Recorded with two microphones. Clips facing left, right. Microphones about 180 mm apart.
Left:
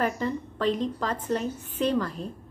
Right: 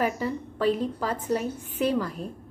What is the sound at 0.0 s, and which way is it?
A woman's voice, 10° right (ahead or behind).